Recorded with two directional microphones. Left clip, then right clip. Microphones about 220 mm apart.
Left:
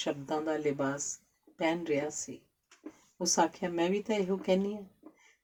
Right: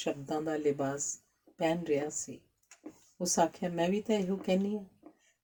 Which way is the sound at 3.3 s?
45° right (ahead or behind).